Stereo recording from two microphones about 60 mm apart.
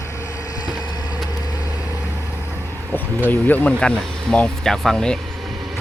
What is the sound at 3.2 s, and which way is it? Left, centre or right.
Speech, left.